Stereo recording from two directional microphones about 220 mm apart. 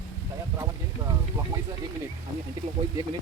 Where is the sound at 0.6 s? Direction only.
15° right (ahead or behind).